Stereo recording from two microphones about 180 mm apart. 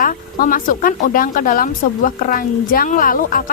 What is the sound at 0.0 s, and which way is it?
Speech, 50° left (ahead or behind).